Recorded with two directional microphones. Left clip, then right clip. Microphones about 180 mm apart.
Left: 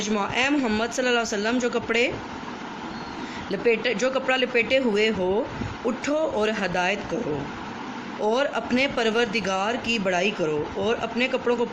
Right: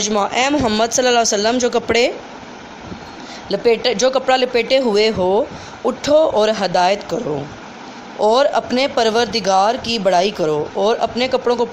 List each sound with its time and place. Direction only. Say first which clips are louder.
0.0 s speech: right 8 dB; 50° right (ahead or behind)
3.5 s speech: right 7 dB; 45° right (ahead or behind)
8.2 s speech: right 10 dB; 45° right (ahead or behind)